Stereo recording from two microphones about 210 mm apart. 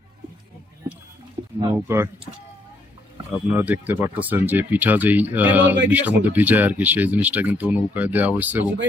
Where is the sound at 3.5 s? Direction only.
10° right (ahead or behind).